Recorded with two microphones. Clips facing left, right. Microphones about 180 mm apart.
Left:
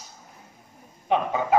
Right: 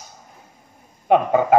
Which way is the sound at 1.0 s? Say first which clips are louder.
Right 8 dB; 50° right (ahead or behind).